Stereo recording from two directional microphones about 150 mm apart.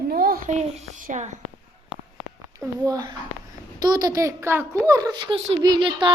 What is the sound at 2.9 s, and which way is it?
A woman's voice, 25° right (ahead or behind).